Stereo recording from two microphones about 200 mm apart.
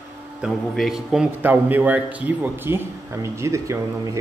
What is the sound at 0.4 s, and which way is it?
A man's voice, centre (ahead or behind).